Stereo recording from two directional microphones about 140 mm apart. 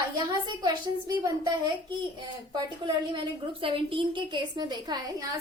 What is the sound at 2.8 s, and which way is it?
A woman's voice, 35° right (ahead or behind).